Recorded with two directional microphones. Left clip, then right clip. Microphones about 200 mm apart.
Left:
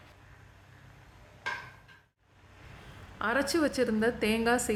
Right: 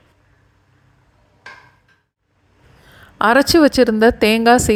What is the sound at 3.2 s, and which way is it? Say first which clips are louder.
A woman's voice: right 17 dB; 45° right (ahead or behind).